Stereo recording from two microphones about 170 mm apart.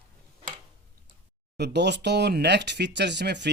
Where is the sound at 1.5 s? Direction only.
80° right.